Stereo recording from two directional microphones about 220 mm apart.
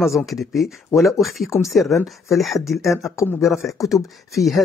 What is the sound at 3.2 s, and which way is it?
Speech, 15° left (ahead or behind).